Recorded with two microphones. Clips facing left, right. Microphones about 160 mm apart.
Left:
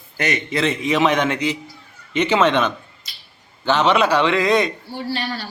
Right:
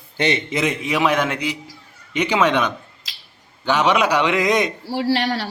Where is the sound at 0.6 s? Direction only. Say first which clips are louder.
Left 2 dB; 10° right (ahead or behind).